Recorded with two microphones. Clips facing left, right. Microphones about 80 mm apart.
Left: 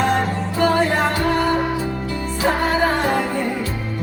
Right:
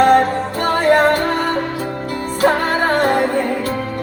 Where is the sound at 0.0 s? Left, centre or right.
Right.